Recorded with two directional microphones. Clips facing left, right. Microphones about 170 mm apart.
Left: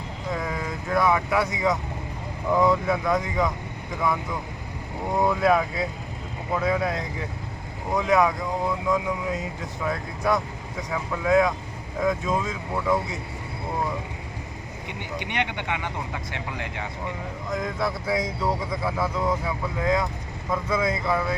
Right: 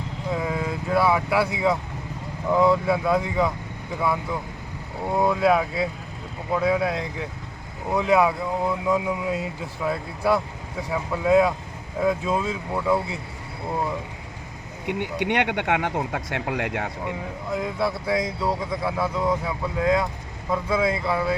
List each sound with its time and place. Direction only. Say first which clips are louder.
0.3 s vehicle: right 3 dB; 5° right (ahead or behind)
2.5 s speech: right 2 dB; 5° right (ahead or behind)
5.1 s speech: right 1 dB; 5° right (ahead or behind)
15.3 s speech: right 6 dB; 65° right (ahead or behind)
17.5 s speech: right 2 dB; 5° right (ahead or behind)